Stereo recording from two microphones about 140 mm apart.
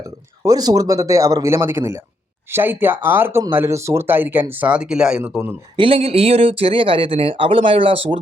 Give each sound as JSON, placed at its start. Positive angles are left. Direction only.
{"t": 0.4, "sound": "a man's voice", "side_deg": -30}
{"t": 5.7, "sound": "speech", "side_deg": -40}